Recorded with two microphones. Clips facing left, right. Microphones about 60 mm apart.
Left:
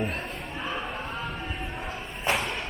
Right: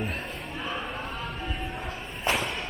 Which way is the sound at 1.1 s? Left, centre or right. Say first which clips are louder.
Left 1 dB; left.